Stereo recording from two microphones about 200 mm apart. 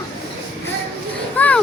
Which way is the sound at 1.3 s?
10° left (ahead or behind).